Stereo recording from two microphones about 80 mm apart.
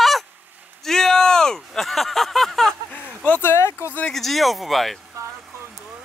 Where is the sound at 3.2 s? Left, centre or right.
Left.